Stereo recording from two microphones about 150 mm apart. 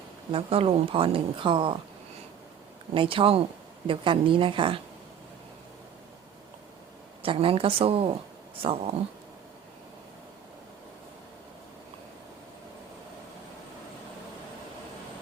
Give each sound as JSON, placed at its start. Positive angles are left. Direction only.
{"t": 0.3, "sound": "speech", "side_deg": -35}
{"t": 2.9, "sound": "speech", "side_deg": -35}
{"t": 7.2, "sound": "speech", "side_deg": -35}